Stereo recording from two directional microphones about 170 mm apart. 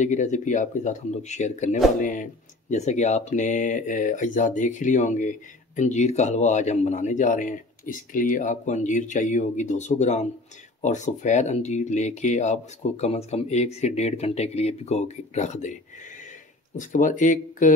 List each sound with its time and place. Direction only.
0.0 s speech: 45° left (ahead or behind)
16.7 s speech: 50° left (ahead or behind)